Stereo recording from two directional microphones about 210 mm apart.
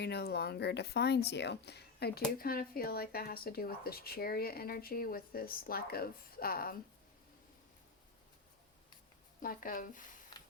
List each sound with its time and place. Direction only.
0.0 s speech: 50° left (ahead or behind)
9.4 s speech: 40° left (ahead or behind)
10.3 s a sound: 20° left (ahead or behind)